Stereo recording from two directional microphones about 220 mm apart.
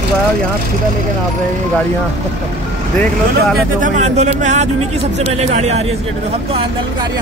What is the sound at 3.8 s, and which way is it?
Speech, 30° right (ahead or behind).